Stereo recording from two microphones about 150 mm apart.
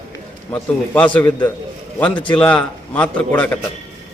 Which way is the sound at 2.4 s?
10° left (ahead or behind).